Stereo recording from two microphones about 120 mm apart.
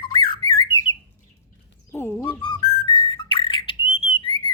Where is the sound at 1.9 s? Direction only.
20° left (ahead or behind).